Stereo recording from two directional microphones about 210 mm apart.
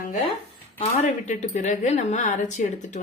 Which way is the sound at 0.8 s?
35° left (ahead or behind).